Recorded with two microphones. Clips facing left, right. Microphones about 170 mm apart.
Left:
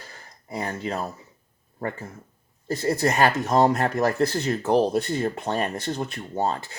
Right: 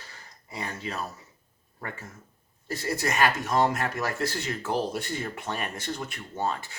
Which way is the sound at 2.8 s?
35° left (ahead or behind).